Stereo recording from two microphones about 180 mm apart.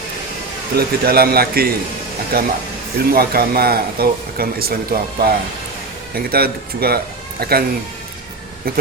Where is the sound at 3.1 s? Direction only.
55° right (ahead or behind).